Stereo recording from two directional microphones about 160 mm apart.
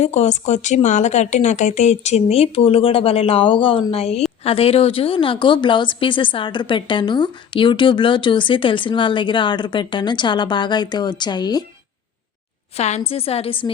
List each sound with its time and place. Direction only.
0.0 s a woman's voice: 45° left (ahead or behind); by 11.6 s 25° left (ahead or behind)
12.7 s a woman's voice: 40° left (ahead or behind)